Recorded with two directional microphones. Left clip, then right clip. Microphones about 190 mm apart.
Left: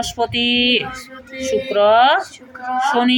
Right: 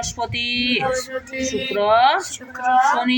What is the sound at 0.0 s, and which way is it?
Speech, 15° left (ahead or behind).